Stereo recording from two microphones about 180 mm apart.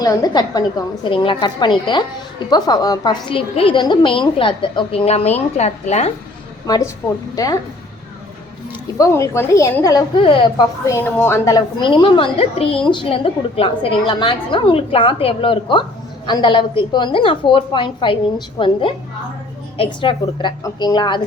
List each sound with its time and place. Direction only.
0.0 s a woman's voice: 20° left (ahead or behind); by 6.1 s 35° left (ahead or behind)
6.7 s a woman's voice: 20° left (ahead or behind)
9.0 s a woman's voice: 20° left (ahead or behind)
10.8 s a woman's voice: 15° left (ahead or behind)